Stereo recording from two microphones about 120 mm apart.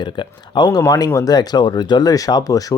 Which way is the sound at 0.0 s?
40° left (ahead or behind).